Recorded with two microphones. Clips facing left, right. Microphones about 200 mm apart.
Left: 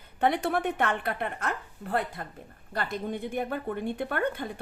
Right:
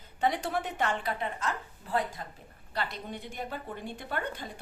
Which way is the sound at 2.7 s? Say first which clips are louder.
Left 5 dB; 50° left (ahead or behind).